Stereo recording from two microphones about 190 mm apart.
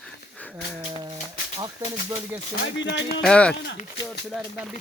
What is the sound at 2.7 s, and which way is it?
Speech, 70° left (ahead or behind).